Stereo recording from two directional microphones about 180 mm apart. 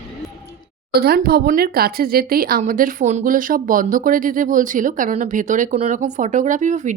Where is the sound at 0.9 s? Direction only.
60° right (ahead or behind).